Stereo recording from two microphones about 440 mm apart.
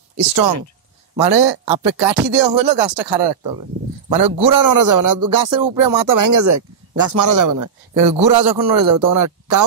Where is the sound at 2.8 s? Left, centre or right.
Right.